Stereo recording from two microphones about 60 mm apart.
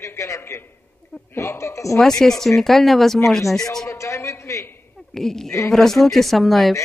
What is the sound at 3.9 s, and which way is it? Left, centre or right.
Speech, left.